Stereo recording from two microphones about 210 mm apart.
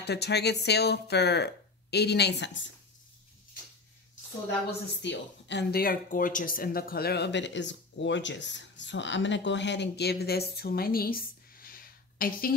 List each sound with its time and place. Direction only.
0.0 s speech: 50° left (ahead or behind)
4.6 s speech: 55° left (ahead or behind)
10.5 s a sound: 50° left (ahead or behind)